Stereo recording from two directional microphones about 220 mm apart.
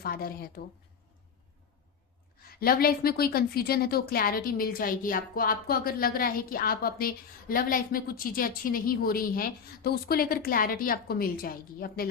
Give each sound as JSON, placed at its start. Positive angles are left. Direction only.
{"t": 0.0, "sound": "a woman's voice", "side_deg": 45}
{"t": 2.5, "sound": "a woman's voice", "side_deg": 45}